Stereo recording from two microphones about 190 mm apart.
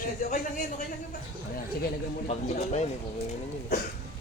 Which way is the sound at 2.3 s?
35° left (ahead or behind).